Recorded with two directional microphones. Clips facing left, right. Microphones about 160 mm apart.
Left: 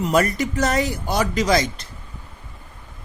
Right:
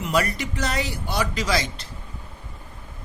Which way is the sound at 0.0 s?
45° left (ahead or behind).